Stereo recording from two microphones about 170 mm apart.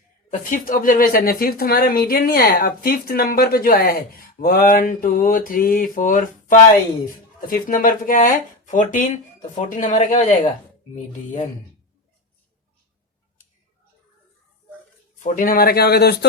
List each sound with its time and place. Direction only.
0.3 s a woman's voice: 55° left (ahead or behind)
15.2 s a woman's voice: 55° left (ahead or behind); by 16.1 s 70° left (ahead or behind)